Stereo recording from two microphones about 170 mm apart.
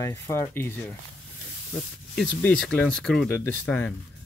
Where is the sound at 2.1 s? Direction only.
5° left (ahead or behind).